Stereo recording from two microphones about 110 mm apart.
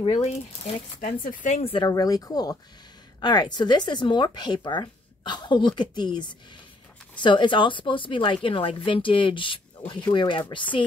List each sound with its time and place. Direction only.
0.0 s speech: 80° left
1.5 s speech: 60° left (ahead or behind)
1.8 s speech: 35° left (ahead or behind)